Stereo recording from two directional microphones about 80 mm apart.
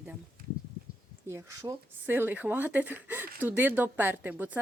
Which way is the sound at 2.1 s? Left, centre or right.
Right.